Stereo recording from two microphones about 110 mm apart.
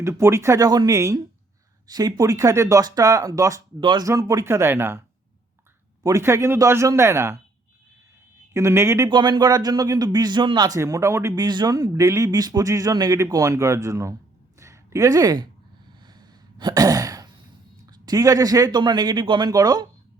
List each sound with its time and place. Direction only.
0.0 s speech: 25° right (ahead or behind)
0.9 s speech: 25° right (ahead or behind)
3.8 s speech: 45° right (ahead or behind)
4.0 s speech: 30° right (ahead or behind)
8.5 s speech: 25° right (ahead or behind)
9.0 s speech: 40° right (ahead or behind)
10.8 s speech: 30° right (ahead or behind)
11.4 s speech: 40° right (ahead or behind)
14.6 s a sound: 30° right (ahead or behind)
16.0 s sigh: 40° right (ahead or behind)
17.9 s speech: 35° right (ahead or behind)